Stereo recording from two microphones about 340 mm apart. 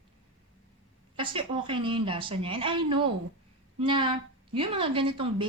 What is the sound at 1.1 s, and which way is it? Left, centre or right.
Speech, centre.